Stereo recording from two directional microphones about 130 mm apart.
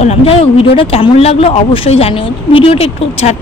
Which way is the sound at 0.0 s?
55° left (ahead or behind).